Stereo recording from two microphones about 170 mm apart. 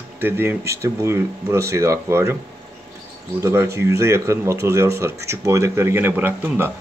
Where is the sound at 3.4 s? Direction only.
15° right (ahead or behind).